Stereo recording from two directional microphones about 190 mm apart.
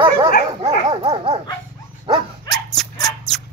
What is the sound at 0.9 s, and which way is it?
Dog, 30° right (ahead or behind).